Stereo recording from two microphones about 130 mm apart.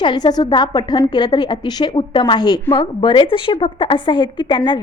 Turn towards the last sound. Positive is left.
turn(degrees=35)  # may be behind; listen again after turning